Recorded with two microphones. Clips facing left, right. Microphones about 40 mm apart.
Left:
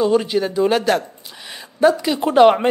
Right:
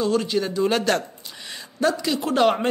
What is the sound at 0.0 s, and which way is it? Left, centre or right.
Speech, centre.